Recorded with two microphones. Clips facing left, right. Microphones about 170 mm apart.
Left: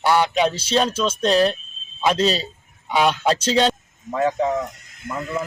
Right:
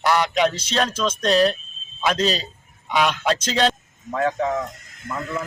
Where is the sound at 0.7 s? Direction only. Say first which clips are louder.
Left 3 dB; 10° left (ahead or behind).